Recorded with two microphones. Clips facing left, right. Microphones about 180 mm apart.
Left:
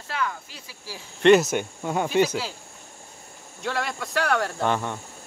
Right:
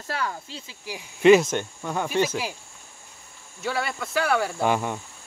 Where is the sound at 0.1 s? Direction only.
30° right (ahead or behind).